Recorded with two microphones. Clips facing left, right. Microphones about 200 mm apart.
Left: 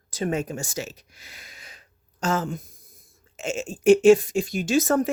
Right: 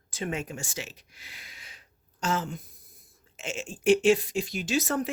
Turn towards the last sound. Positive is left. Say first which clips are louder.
# left 7 dB
turn(degrees=45)  # may be behind; listen again after turning